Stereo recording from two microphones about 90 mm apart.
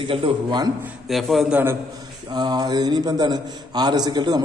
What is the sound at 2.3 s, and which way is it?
A man's voice, 50° right (ahead or behind).